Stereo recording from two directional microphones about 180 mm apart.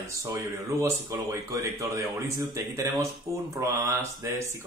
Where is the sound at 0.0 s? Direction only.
15° right (ahead or behind).